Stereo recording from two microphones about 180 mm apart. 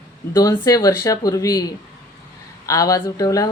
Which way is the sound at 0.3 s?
20° left (ahead or behind).